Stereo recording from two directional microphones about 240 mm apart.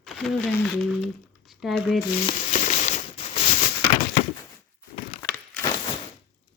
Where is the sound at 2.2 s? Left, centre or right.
Left.